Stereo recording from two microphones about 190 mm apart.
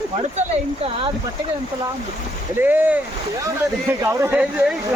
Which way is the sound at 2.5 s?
10° right (ahead or behind).